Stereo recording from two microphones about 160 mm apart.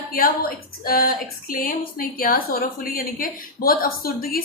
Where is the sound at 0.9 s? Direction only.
65° left (ahead or behind).